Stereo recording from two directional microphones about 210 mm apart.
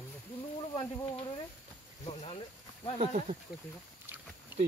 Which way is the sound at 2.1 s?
30° left (ahead or behind).